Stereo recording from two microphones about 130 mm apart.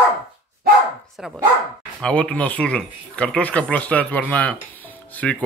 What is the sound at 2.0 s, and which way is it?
Speech, 10° left (ahead or behind).